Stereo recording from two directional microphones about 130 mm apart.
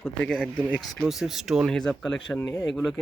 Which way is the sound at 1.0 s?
5° right (ahead or behind).